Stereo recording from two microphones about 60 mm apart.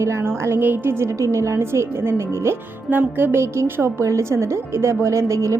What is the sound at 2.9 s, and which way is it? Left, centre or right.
Music, right.